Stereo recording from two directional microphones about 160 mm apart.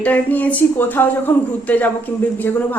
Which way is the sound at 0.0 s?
10° left (ahead or behind).